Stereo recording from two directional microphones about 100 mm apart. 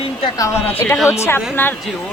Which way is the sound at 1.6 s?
20° left (ahead or behind).